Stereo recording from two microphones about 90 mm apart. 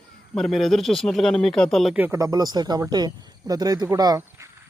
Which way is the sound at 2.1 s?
45° right (ahead or behind).